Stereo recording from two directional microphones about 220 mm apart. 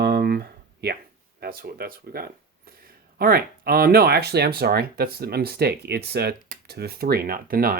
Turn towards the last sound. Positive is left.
turn(degrees=-45)  # may be behind; listen again after turning